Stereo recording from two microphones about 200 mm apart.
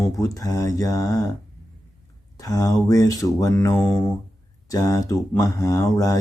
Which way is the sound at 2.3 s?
15° left (ahead or behind).